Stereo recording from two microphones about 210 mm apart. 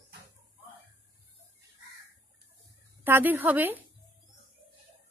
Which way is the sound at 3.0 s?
10° right (ahead or behind).